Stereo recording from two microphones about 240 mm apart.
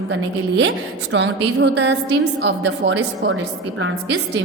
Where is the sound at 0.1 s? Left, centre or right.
Right.